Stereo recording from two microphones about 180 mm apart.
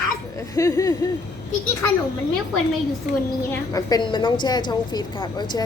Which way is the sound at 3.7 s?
25° left (ahead or behind).